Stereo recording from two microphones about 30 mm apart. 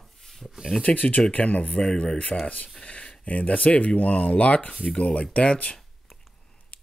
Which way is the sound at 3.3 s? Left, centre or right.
Left.